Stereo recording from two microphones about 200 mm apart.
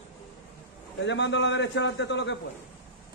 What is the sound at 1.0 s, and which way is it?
A man's voice, 60° left (ahead or behind).